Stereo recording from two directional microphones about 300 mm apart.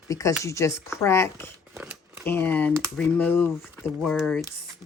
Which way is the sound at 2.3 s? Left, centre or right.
Centre.